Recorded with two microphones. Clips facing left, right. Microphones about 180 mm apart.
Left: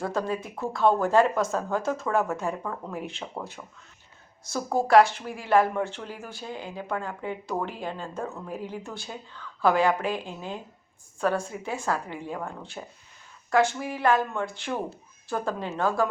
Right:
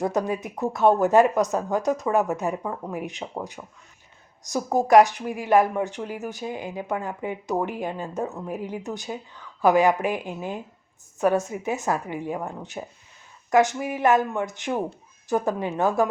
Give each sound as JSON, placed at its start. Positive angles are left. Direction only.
{"t": 0.0, "sound": "a woman's voice", "side_deg": -20}